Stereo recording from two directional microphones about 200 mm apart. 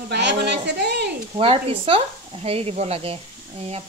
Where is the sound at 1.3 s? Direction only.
30° right (ahead or behind).